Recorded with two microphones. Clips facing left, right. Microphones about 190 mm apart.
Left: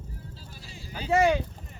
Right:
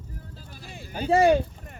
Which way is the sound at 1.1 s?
35° right (ahead or behind).